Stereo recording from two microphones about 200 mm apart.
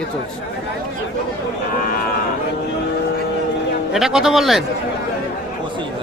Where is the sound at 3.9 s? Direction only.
Centre (ahead or behind).